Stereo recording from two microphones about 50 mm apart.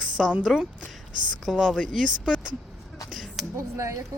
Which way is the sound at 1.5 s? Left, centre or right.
Centre.